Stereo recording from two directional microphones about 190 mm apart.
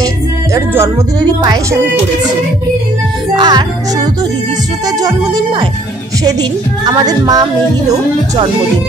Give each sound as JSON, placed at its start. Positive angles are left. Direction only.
{"t": 0.6, "sound": "speech", "side_deg": -15}
{"t": 3.3, "sound": "music", "side_deg": -20}
{"t": 6.8, "sound": "music", "side_deg": -20}